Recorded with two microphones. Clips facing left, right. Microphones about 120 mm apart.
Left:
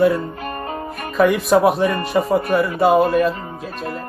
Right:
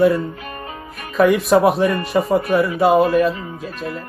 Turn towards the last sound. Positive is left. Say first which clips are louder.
# right 1 dB
turn(degrees=0)  # may be behind; listen again after turning